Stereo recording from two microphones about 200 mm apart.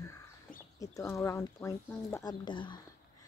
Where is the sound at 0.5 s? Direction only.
15° left (ahead or behind).